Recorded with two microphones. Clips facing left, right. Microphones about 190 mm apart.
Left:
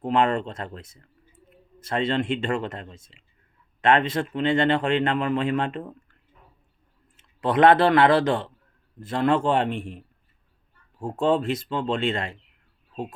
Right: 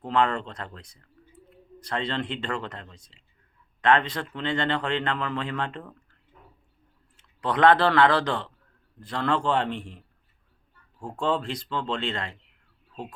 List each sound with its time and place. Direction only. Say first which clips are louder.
0.0 s speech: left 3 dB; 20° left (ahead or behind)
7.2 s speech: left 3 dB; 25° left (ahead or behind)
11.0 s speech: left 5 dB; 25° left (ahead or behind)